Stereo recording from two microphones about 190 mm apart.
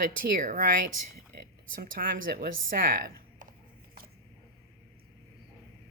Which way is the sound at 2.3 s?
50° right (ahead or behind).